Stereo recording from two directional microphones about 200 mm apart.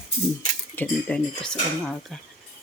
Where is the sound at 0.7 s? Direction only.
5° left (ahead or behind).